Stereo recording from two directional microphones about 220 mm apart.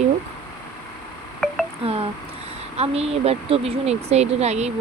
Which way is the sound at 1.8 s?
25° right (ahead or behind).